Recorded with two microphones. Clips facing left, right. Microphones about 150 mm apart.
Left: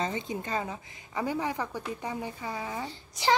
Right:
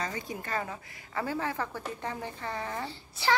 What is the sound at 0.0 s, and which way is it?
A woman's voice, 20° left (ahead or behind).